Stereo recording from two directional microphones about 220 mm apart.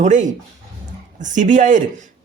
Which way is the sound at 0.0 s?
35° right (ahead or behind).